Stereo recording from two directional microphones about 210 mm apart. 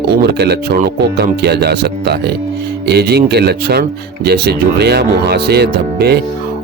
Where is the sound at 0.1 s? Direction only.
50° right (ahead or behind).